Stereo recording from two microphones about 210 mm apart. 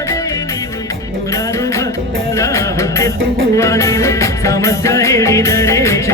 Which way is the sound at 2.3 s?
15° left (ahead or behind).